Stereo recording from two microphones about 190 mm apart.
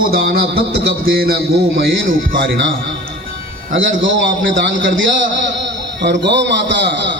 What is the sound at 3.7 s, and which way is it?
A man's voice, 90° right.